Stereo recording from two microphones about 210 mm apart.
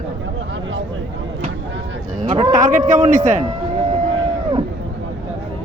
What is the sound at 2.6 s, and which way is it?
Speech, 40° right (ahead or behind).